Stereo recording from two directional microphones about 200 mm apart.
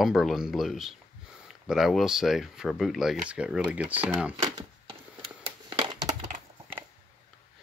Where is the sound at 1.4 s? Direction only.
Centre (ahead or behind); by 6.3 s 25° right (ahead or behind).